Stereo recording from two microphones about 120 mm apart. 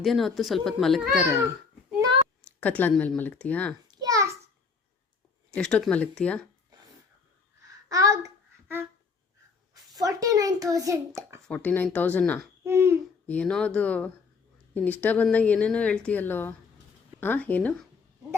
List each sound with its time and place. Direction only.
0.0 s speech: centre (ahead or behind)
2.6 s a woman's voice: 15° left (ahead or behind)
2.9 s speech: 5° left (ahead or behind)
3.2 s a woman's voice: 15° left (ahead or behind)
3.8 s a sound: 30° right (ahead or behind)
5.5 s a woman's voice: 10° left (ahead or behind)
7.9 s child singing: 30° right (ahead or behind)
9.9 s a child's voice: 30° right (ahead or behind)
11.4 s a woman's voice: 10° left (ahead or behind)
12.6 s a child's voice: 20° right (ahead or behind)
13.2 s a woman's voice: 10° left (ahead or behind)